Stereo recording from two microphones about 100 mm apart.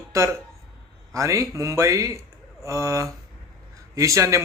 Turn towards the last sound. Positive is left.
turn(degrees=-30)  # may be behind; listen again after turning